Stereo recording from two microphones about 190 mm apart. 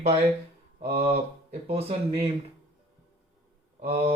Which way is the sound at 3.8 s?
35° right (ahead or behind).